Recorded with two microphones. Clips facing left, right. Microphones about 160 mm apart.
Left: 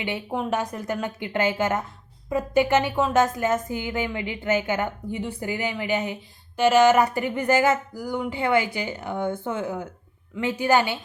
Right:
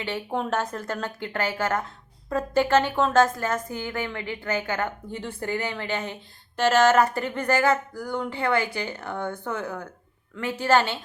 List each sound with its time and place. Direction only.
0.3 s a woman's voice: 5° left (ahead or behind)